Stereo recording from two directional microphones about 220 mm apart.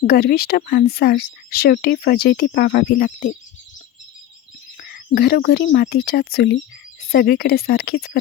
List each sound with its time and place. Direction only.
0.1 s speech: 45° left (ahead or behind)
4.8 s speech: 45° left (ahead or behind)